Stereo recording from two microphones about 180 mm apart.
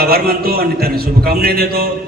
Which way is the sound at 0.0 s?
60° right (ahead or behind).